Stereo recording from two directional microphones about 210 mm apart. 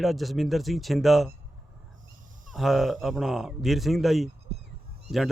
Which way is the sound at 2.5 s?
Centre (ahead or behind).